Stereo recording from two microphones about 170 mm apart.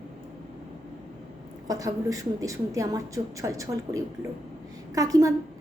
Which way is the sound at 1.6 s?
20° right (ahead or behind).